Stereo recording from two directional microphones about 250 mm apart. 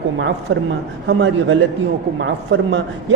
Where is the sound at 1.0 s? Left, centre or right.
Right.